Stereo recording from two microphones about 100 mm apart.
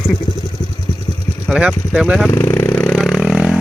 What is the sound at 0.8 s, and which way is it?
Vehicle, 30° left (ahead or behind).